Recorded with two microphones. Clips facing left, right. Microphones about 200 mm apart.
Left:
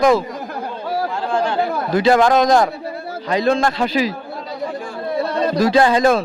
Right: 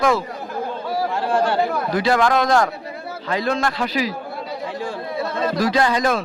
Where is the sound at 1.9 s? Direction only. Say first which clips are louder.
Left 5 dB; 25° left (ahead or behind).